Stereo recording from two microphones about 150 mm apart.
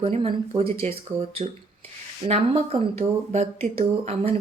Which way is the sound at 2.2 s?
45° right (ahead or behind).